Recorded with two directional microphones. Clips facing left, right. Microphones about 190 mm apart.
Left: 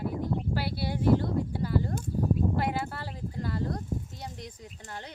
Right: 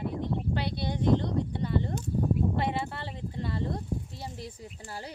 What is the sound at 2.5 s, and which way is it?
Clip-clop, centre (ahead or behind).